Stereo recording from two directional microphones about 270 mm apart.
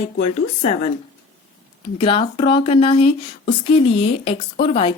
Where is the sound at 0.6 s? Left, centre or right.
Left.